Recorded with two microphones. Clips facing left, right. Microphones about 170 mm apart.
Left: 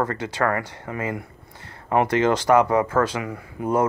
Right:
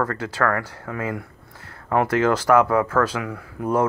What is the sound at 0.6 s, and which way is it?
Speech, centre (ahead or behind).